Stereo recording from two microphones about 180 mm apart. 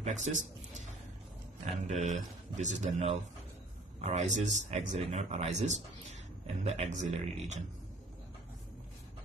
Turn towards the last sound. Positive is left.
turn(degrees=-40)  # may be behind; listen again after turning